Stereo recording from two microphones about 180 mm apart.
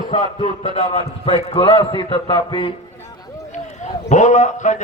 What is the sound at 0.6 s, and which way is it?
A man's voice, 35° left (ahead or behind).